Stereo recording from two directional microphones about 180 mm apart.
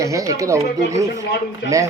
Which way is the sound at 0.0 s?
15° right (ahead or behind).